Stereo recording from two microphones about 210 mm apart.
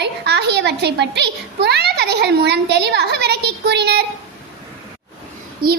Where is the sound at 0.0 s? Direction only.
55° right (ahead or behind).